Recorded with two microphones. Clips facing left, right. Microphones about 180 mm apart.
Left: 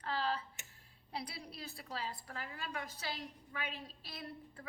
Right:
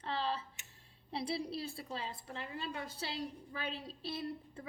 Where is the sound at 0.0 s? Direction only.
25° right (ahead or behind).